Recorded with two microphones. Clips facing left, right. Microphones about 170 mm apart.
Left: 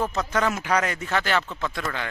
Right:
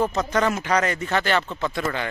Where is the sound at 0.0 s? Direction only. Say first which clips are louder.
Right 3 dB; centre (ahead or behind).